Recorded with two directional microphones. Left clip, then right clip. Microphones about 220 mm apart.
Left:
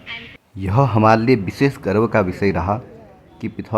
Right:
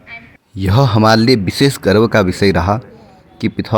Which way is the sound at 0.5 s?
20° right (ahead or behind).